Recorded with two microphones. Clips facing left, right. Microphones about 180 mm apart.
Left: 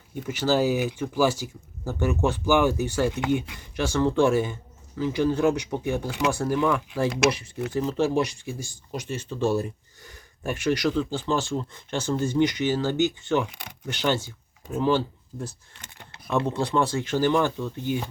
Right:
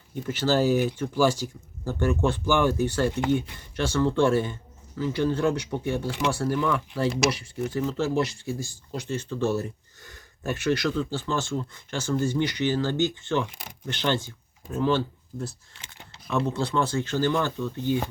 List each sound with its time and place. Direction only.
0.3 s speech: 10° left (ahead or behind)
16.5 s speech: 15° left (ahead or behind)